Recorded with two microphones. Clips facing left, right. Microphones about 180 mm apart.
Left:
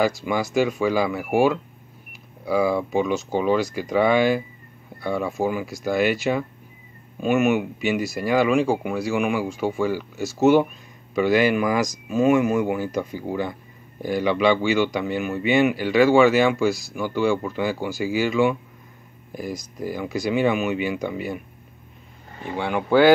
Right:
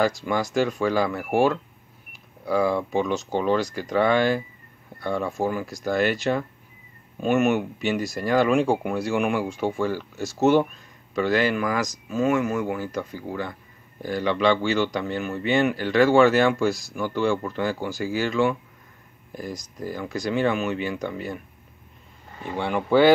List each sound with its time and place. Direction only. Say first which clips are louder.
0.0 s speech: left 1 dB; 10° left (ahead or behind)
22.4 s speech: left 1 dB; centre (ahead or behind)